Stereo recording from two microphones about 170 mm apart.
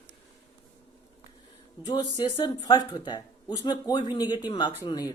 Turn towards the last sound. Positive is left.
turn(degrees=25)  # may be behind; listen again after turning